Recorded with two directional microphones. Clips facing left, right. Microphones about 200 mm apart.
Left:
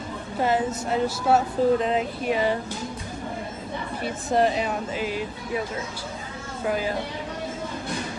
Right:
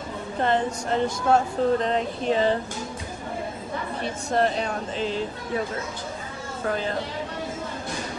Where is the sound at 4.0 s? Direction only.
Centre (ahead or behind).